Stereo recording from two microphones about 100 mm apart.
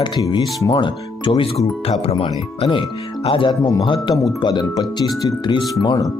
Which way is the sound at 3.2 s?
60° left (ahead or behind).